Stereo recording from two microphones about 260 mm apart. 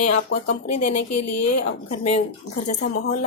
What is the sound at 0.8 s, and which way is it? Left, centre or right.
Speech, left.